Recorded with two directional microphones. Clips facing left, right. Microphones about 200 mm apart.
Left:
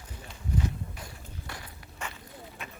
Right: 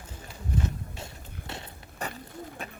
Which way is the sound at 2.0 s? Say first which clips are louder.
Right 5 dB; 35° right (ahead or behind).